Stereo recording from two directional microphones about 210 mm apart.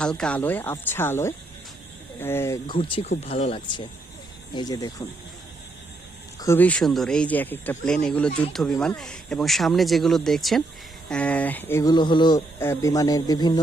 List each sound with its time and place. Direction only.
0.0 s speech: 5° left (ahead or behind)
2.7 s speech: 25° left (ahead or behind)
6.4 s speech: 10° left (ahead or behind)